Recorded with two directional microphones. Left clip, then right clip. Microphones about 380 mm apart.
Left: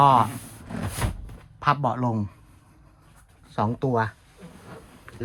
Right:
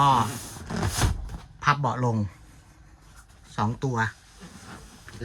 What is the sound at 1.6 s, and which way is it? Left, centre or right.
Speech, centre.